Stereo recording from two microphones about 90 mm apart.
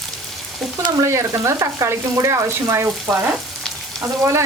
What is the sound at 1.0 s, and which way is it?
Speech, 35° right (ahead or behind).